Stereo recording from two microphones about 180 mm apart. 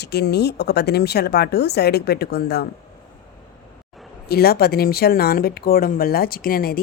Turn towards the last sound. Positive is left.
turn(degrees=55)  # may be behind; listen again after turning